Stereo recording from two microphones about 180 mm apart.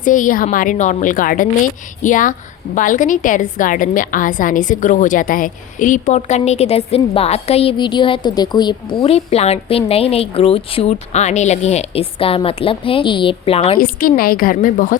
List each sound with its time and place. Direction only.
0.0 s a woman's voice: 45° left (ahead or behind)
13.7 s a woman's voice: 55° left (ahead or behind)